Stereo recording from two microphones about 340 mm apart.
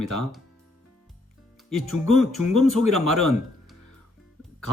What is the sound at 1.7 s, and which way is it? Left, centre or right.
Speech, centre.